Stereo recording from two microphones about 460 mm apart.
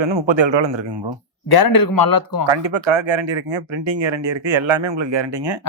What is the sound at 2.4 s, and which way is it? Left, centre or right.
Speech, right.